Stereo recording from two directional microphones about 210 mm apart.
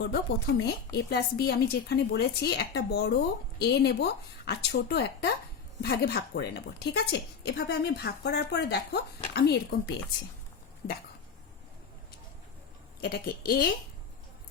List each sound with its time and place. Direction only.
0.0 s a woman's voice: 55° left (ahead or behind)
13.0 s a woman's voice: 45° left (ahead or behind)